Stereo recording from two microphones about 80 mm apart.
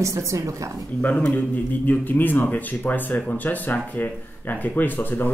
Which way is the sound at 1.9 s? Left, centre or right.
Left.